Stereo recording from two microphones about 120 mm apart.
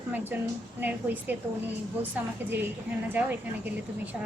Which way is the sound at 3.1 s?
15° right (ahead or behind).